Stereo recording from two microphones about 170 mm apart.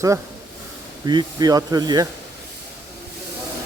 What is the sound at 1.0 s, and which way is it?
Speech, 25° right (ahead or behind).